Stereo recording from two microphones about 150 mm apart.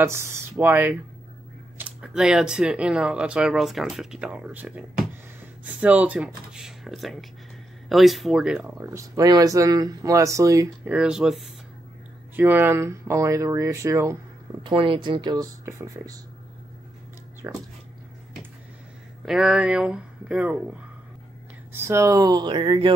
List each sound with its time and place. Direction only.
0.0 s speech: 20° right (ahead or behind)
8.7 s speech: 20° right (ahead or behind)
10.9 s speech: 5° right (ahead or behind)
12.4 s speech: 15° right (ahead or behind)
14.6 s speech: 35° right (ahead or behind)
17.4 s speech: 15° right (ahead or behind)
19.2 s speech: 5° right (ahead or behind)
21.7 s speech: 20° right (ahead or behind); by 22.8 s 35° right (ahead or behind)